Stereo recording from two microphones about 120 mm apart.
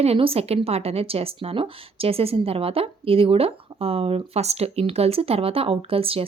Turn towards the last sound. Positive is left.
turn(degrees=-50)  # may be behind; listen again after turning